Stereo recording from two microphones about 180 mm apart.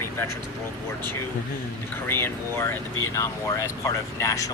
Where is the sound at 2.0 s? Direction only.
15° left (ahead or behind).